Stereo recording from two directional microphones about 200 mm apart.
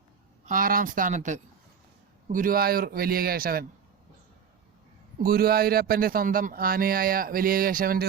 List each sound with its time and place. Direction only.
0.4 s speech: 45° right (ahead or behind)
5.1 s speech: 50° right (ahead or behind)